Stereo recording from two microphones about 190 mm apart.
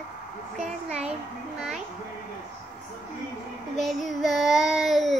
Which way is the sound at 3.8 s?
Centre (ahead or behind).